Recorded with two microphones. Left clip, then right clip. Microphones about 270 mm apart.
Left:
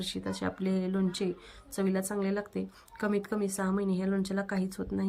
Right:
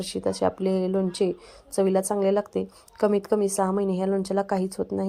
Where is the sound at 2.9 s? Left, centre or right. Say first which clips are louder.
Right 10 dB; right.